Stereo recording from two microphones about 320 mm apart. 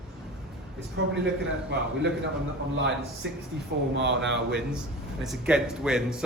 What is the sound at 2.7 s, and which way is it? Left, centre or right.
Speech, right.